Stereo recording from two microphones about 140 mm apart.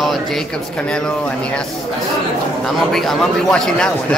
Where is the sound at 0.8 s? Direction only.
5° left (ahead or behind).